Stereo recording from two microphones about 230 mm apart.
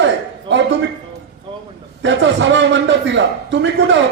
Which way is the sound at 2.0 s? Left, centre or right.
Right.